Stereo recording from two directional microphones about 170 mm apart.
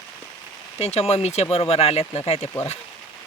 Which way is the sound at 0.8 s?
40° left (ahead or behind).